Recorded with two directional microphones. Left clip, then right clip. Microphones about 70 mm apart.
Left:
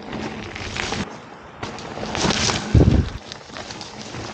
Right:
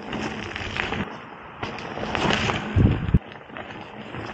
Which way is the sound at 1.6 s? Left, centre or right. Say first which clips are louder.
Even; centre.